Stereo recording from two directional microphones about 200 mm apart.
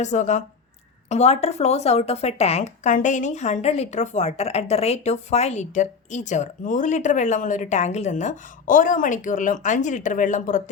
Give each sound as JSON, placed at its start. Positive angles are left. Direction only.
{"t": 0.0, "sound": "a woman's voice", "side_deg": 35}